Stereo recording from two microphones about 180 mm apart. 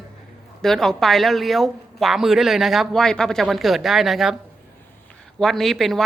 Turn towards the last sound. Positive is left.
turn(degrees=0)  # may be behind; listen again after turning